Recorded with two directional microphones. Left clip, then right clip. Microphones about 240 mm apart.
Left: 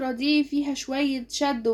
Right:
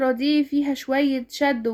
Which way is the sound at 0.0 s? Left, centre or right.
Right.